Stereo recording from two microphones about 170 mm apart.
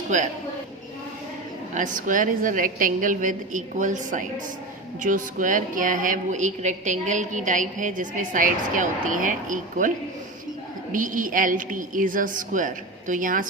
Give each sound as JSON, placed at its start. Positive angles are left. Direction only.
{"t": 1.7, "sound": "a woman's voice", "side_deg": -50}
{"t": 10.9, "sound": "a woman's voice", "side_deg": -50}